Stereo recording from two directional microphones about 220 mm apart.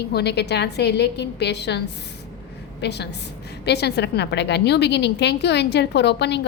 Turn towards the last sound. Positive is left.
turn(degrees=50)  # may be behind; listen again after turning